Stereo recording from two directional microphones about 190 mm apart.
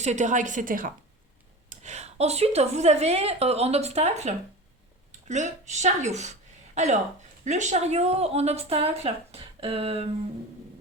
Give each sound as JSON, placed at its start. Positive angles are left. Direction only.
{"t": 0.0, "sound": "a woman's voice", "side_deg": -40}